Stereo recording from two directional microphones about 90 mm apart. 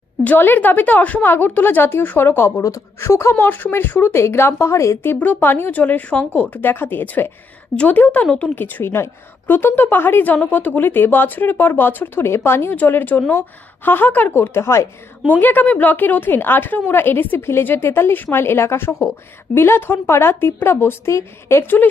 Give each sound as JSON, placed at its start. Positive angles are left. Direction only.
{"t": 0.2, "sound": "a woman's voice", "side_deg": 20}
{"t": 5.1, "sound": "a woman's voice", "side_deg": 20}
{"t": 15.2, "sound": "a woman's voice", "side_deg": 20}